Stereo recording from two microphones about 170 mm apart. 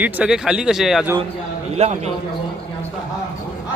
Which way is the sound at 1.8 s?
40° right (ahead or behind).